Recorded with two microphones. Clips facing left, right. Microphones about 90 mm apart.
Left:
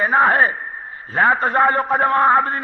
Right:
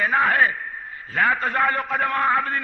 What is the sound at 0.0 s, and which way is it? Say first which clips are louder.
A man's voice: left 4 dB; 30° left (ahead or behind).